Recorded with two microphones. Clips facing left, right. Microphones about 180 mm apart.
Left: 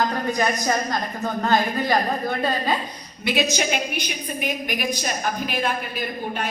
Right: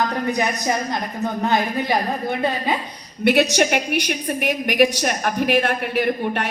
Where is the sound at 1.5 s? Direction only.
20° right (ahead or behind).